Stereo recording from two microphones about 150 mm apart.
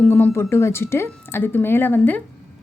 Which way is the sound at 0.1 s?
15° left (ahead or behind).